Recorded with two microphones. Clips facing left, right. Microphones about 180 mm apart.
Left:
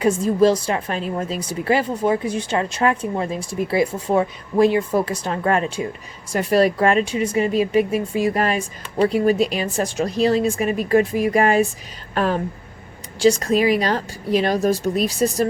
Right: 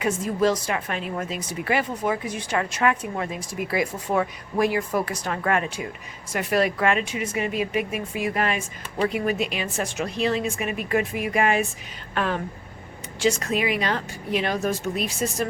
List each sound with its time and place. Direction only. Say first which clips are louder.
0.0 s a woman's voice: left 6 dB; 30° left (ahead or behind)